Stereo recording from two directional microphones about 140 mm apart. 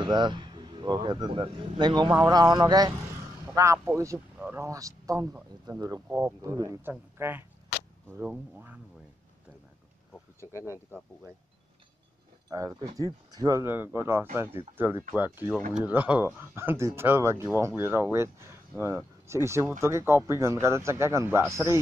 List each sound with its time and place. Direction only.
0.0 s speech: 30° right (ahead or behind)
6.0 s speech: 15° right (ahead or behind)
10.1 s a sound: 20° left (ahead or behind)
12.4 s speech: 25° right (ahead or behind)